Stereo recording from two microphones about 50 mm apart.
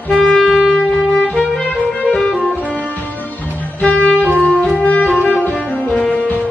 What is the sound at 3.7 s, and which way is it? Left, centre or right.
Music, left.